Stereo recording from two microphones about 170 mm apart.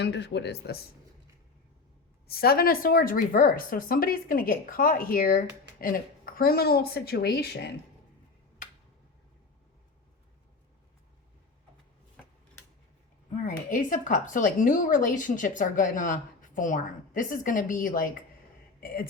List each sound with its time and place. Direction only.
0.0 s speech: 90° left
2.2 s a woman's voice: 65° left (ahead or behind)
13.3 s a woman's voice: 55° left (ahead or behind)